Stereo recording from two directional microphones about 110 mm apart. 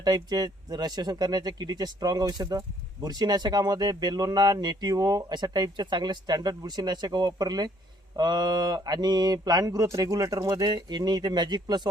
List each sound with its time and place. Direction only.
0.0 s speech: 35° right (ahead or behind)